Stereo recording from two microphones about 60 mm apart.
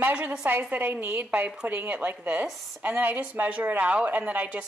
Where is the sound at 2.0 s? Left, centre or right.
Right.